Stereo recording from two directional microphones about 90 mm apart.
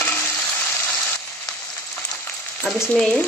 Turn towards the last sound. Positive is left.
turn(degrees=0)  # may be behind; listen again after turning